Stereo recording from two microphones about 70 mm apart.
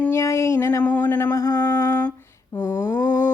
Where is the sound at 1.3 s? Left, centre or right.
Left.